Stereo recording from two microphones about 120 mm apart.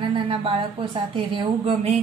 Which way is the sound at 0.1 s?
45° right (ahead or behind).